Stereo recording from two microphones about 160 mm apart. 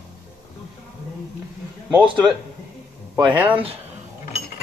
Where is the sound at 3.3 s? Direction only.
10° right (ahead or behind).